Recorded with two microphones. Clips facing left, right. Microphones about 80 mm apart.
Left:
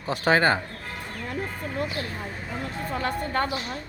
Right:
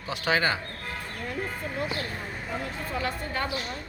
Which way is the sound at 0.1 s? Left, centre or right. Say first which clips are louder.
Left 5 dB; left.